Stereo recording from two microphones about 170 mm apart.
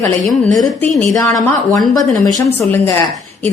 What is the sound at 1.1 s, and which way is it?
Speech, 20° left (ahead or behind).